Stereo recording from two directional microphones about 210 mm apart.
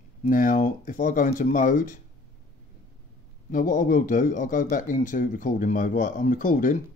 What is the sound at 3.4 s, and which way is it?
Speech, 40° left (ahead or behind).